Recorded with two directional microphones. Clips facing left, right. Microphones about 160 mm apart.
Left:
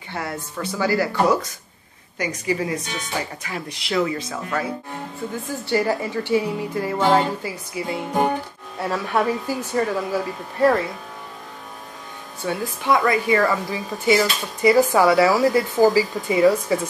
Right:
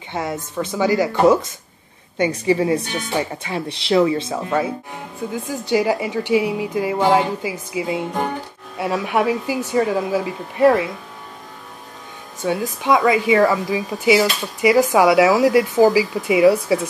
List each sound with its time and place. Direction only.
0.1 s speech: 20° right (ahead or behind)
5.3 s speech: 15° right (ahead or behind)
12.4 s speech: 15° right (ahead or behind)